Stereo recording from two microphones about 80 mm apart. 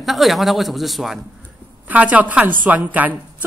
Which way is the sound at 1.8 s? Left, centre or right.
Centre.